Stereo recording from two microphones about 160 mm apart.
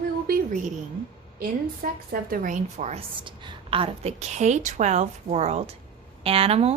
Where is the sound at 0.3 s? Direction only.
65° right (ahead or behind).